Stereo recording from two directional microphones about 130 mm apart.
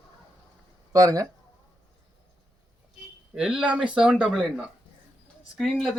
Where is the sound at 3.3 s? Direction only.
5° right (ahead or behind).